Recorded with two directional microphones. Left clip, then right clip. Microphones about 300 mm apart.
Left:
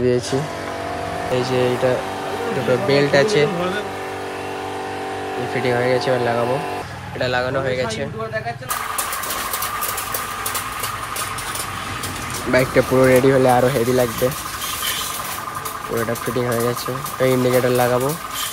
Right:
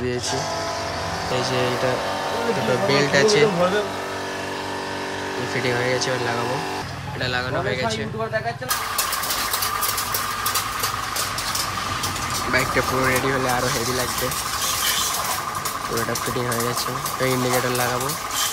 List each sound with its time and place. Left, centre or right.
1.3 s speech: centre
2.9 s speech: centre
5.6 s speech: centre
12.5 s speech: centre
17.2 s speech: centre